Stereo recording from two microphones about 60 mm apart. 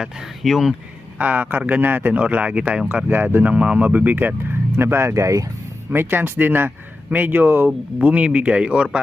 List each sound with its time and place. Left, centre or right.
0.4 s speech: centre
1.2 s speech: right
2.9 s speech: right
4.8 s speech: right
5.9 s speech: right
7.9 s speech: right